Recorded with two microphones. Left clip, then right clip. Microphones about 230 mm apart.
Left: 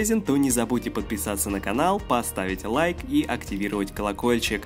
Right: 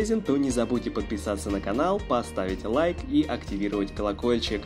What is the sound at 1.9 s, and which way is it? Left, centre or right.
Speech, left.